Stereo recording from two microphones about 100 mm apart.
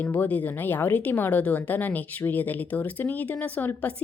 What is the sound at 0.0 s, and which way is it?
A woman's voice, 15° left (ahead or behind).